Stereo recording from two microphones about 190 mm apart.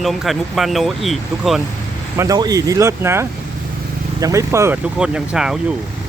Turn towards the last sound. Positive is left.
turn(degrees=-5)  # may be behind; listen again after turning